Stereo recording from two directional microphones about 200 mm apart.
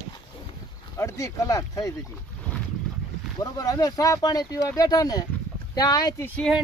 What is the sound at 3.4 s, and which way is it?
Speech, 15° left (ahead or behind).